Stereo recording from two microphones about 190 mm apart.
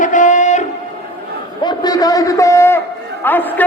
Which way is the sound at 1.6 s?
20° left (ahead or behind).